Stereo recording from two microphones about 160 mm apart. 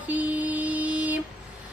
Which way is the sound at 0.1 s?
10° right (ahead or behind).